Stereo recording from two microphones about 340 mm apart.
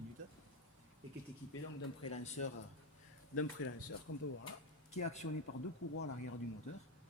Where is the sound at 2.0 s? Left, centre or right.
Left.